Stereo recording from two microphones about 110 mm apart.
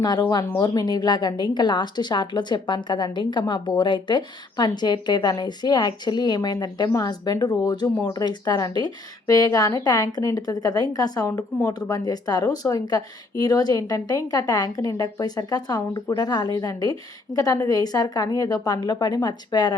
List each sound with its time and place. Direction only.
0.0 s a woman's voice: 40° left (ahead or behind)